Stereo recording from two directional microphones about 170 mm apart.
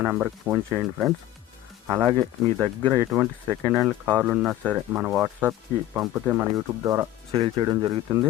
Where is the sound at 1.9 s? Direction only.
15° right (ahead or behind).